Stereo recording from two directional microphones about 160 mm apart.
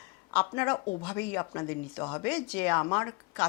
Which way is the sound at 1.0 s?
15° left (ahead or behind).